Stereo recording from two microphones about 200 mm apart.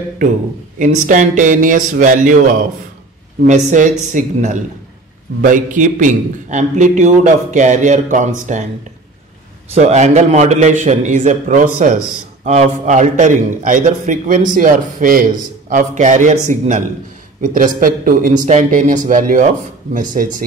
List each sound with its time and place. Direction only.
0.7 s a man's voice: 40° right (ahead or behind)
3.4 s a man's voice: 40° right (ahead or behind)
9.7 s a man's voice: 35° right (ahead or behind)